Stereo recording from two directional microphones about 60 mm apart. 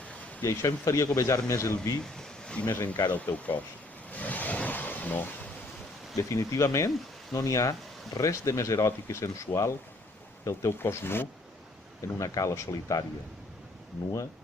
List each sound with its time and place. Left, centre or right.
0.4 s speech: left
2.1 s a sound: centre
2.6 s speech: left
3.3 s speech: left
4.1 s vehicle: left
6.1 s speech: left
10.8 s speech: left
12.0 s speech: left